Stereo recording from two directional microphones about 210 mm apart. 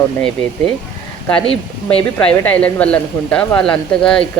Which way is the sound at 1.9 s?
5° left (ahead or behind).